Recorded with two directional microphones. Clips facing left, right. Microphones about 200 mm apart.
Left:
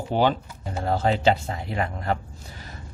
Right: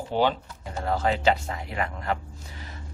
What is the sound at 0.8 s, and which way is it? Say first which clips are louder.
Speech: left 2 dB; 30° left (ahead or behind).